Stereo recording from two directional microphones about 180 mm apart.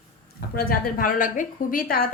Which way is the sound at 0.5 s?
55° left (ahead or behind).